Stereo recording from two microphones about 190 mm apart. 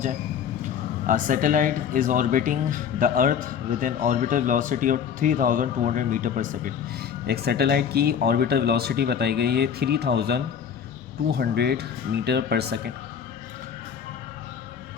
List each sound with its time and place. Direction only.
0.6 s speech: 45° right (ahead or behind)
7.3 s speech: 55° right (ahead or behind)